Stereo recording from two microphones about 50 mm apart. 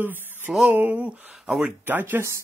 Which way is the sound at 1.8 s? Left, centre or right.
Right.